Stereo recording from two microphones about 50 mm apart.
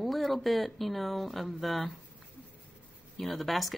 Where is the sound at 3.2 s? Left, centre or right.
Centre.